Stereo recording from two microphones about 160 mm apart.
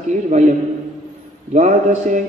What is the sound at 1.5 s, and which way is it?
Speech, 50° right (ahead or behind).